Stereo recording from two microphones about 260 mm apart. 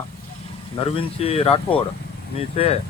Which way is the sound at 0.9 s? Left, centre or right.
Left.